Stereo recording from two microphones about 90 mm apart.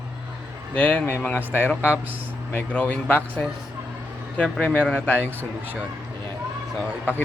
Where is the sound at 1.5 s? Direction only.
25° left (ahead or behind).